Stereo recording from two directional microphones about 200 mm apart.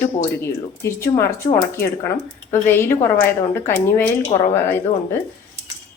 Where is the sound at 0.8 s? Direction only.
15° left (ahead or behind).